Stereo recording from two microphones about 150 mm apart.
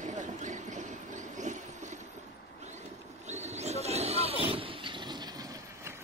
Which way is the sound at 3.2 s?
50° right (ahead or behind).